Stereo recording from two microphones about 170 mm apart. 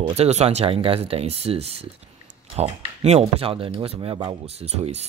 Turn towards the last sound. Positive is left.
turn(degrees=-40)  # may be behind; listen again after turning